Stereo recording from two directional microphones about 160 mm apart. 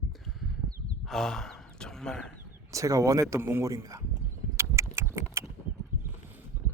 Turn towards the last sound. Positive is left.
turn(degrees=-15)  # may be behind; listen again after turning